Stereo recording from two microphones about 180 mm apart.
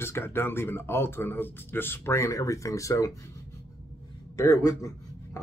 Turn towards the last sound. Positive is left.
turn(degrees=20)  # may be behind; listen again after turning